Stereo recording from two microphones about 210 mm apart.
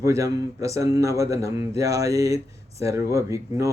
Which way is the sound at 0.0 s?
15° right (ahead or behind).